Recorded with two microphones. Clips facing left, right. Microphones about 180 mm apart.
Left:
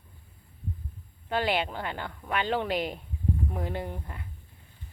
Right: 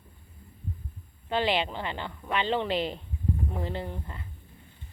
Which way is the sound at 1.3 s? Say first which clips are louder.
Right 1 dB; 5° left (ahead or behind).